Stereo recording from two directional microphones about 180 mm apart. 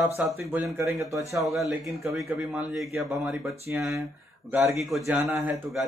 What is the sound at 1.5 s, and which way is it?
Speech, centre (ahead or behind).